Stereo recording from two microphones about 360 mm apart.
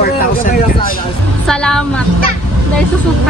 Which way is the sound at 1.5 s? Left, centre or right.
Centre.